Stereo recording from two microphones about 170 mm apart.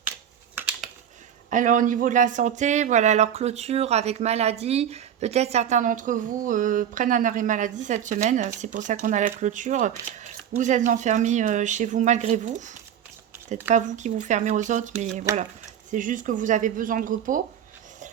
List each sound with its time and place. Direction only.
1.5 s speech: 50° right (ahead or behind)
15.3 s speech: 15° right (ahead or behind)
15.9 s speech: 50° right (ahead or behind)